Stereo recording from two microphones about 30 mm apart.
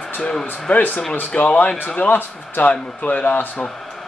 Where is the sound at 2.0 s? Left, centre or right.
Left.